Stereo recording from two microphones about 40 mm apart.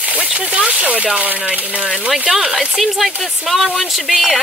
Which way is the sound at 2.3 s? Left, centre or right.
Centre.